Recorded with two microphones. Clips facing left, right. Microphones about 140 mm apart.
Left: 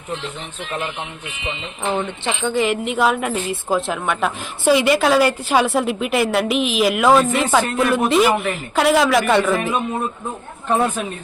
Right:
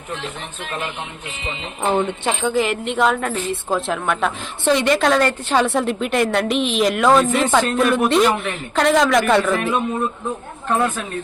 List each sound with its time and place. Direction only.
1.8 s speech: 45° right (ahead or behind)
2.4 s a woman's voice: centre (ahead or behind)
10.7 s speech: 10° left (ahead or behind)